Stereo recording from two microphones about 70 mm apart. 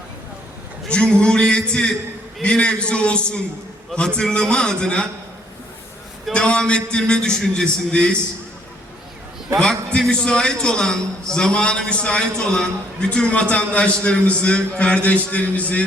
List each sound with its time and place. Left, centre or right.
0.9 s a man's voice: centre
6.3 s a man's voice: centre
9.6 s a man's voice: centre